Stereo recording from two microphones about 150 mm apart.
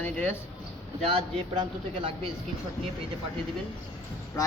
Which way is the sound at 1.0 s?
35° right (ahead or behind).